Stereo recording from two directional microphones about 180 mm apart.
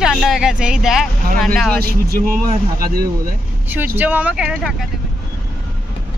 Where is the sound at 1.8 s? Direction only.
55° right (ahead or behind).